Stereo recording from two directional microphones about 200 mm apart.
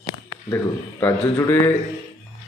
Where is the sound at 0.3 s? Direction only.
15° left (ahead or behind).